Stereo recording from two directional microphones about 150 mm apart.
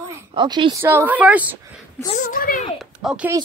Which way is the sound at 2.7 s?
5° right (ahead or behind).